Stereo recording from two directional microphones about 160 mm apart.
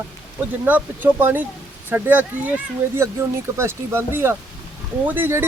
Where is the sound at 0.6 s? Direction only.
10° right (ahead or behind).